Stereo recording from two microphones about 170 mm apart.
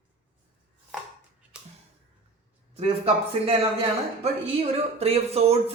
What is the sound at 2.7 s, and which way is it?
Speech, 35° right (ahead or behind).